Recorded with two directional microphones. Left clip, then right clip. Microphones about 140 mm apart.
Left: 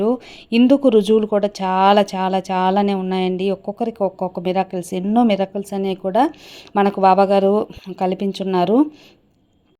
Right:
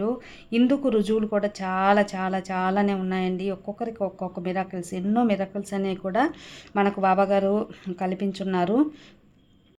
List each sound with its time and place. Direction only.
0.0 s speech: 35° left (ahead or behind)
5.6 s speech: 25° left (ahead or behind)